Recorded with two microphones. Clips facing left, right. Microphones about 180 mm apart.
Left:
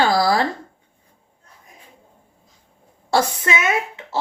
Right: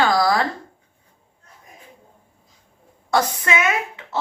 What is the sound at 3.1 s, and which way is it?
Speech, 25° left (ahead or behind).